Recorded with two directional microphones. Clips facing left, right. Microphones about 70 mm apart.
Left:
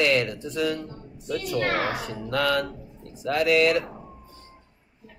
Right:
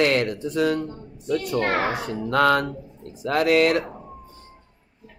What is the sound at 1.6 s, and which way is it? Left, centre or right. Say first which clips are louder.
Speech: right 1 dB; right.